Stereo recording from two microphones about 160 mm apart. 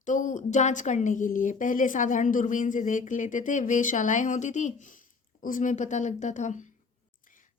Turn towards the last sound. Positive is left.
turn(degrees=50)  # may be behind; listen again after turning